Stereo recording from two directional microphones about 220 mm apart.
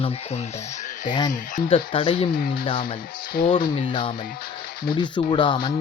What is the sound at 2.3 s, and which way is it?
Speech, 40° left (ahead or behind).